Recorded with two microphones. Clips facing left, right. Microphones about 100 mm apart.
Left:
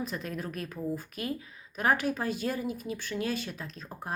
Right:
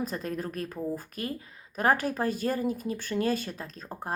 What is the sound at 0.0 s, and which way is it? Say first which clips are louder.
Speech: right 3 dB; 40° right (ahead or behind).